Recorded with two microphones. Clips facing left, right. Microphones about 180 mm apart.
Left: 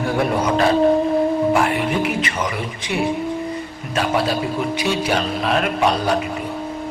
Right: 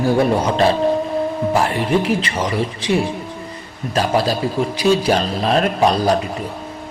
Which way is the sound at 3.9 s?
35° right (ahead or behind).